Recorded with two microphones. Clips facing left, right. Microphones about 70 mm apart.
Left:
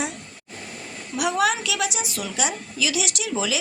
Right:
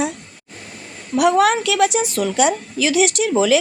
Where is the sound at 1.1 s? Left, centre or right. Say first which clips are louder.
Right 8 dB; right.